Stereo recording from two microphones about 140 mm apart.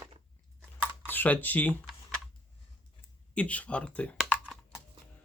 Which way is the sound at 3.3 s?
10° left (ahead or behind).